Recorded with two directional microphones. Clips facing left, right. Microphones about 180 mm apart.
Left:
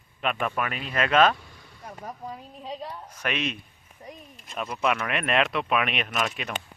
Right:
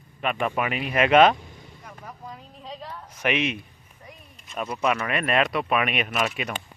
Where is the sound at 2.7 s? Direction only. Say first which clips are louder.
Left 2 dB; 20° left (ahead or behind).